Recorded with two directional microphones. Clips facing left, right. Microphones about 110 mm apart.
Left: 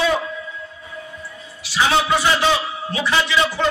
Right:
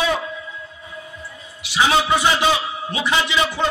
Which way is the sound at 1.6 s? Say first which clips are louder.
Even; 20° right (ahead or behind).